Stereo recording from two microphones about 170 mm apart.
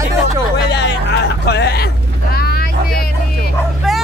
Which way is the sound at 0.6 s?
90° left.